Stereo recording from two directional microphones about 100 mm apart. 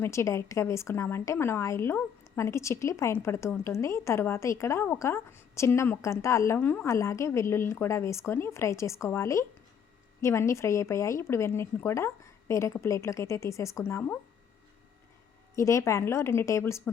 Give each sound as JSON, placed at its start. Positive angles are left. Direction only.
{"t": 0.0, "sound": "speech", "side_deg": 30}
{"t": 15.5, "sound": "speech", "side_deg": 30}